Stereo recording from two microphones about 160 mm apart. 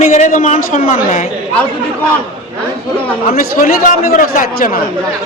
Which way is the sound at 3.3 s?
60° left (ahead or behind).